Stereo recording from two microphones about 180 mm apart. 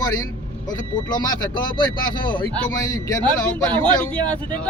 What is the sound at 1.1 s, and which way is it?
A man's voice, 25° left (ahead or behind).